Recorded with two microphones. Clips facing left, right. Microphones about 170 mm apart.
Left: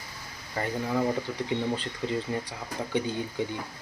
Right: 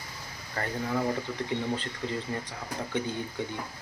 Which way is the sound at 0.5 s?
10° left (ahead or behind).